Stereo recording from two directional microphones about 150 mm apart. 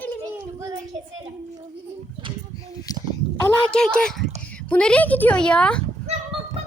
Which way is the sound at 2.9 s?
25° left (ahead or behind).